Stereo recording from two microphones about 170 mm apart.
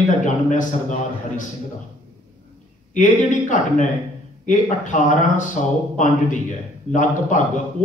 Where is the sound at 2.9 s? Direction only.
45° left (ahead or behind).